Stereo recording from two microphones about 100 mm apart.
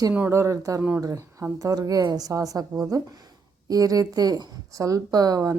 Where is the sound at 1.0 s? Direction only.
35° right (ahead or behind).